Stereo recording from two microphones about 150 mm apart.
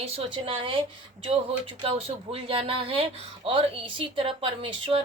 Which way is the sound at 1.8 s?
40° right (ahead or behind).